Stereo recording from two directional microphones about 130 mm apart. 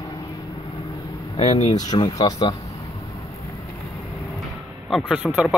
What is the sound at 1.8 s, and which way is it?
Speech, 30° left (ahead or behind).